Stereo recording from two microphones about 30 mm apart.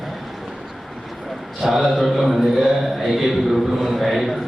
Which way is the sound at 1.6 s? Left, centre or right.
Centre.